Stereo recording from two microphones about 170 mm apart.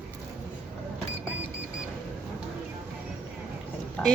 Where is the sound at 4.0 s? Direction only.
5° left (ahead or behind).